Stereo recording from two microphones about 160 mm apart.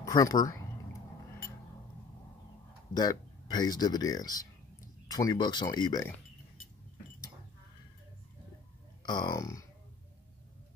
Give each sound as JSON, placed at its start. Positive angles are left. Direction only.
{"t": 0.0, "sound": "speech", "side_deg": 20}
{"t": 2.9, "sound": "speech", "side_deg": 25}
{"t": 9.0, "sound": "speech", "side_deg": 25}